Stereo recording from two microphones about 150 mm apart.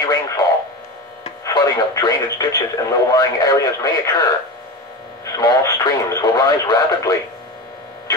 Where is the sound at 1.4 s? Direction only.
25° left (ahead or behind).